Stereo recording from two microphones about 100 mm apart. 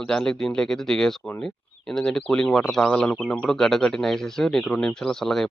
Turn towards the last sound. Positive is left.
turn(degrees=5)  # may be behind; listen again after turning